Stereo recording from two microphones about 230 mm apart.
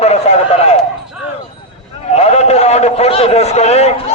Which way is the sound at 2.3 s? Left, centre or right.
Left.